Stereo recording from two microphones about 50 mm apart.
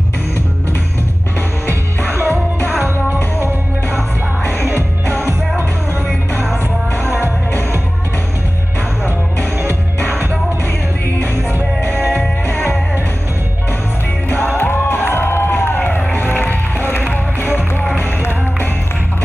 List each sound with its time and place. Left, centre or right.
1.7 s music: right
12.4 s music: left
14.3 s music: left